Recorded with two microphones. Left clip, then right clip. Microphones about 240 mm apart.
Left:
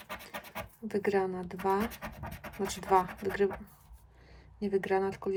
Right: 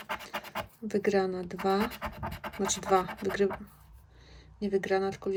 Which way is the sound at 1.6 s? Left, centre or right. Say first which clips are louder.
Right 2 dB; right.